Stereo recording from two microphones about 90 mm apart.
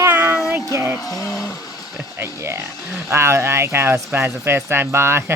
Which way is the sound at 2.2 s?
30° right (ahead or behind).